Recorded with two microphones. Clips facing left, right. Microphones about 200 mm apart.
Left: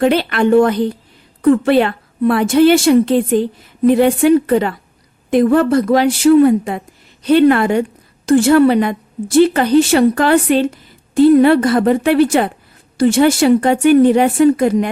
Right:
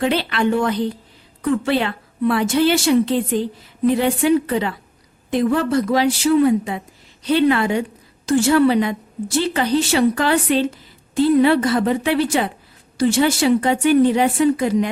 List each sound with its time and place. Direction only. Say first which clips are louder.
0.0 s speech: left 5 dB; 50° left (ahead or behind)